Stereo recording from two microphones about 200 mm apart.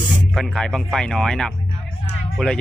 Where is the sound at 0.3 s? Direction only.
5° left (ahead or behind).